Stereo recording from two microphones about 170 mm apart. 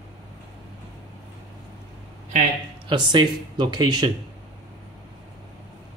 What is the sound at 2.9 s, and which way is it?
Speech, 25° right (ahead or behind).